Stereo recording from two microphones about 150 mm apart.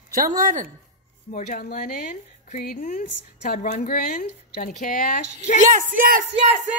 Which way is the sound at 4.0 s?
75° left (ahead or behind).